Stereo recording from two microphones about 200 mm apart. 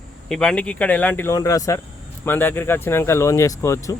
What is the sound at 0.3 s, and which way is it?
Speech, 5° left (ahead or behind).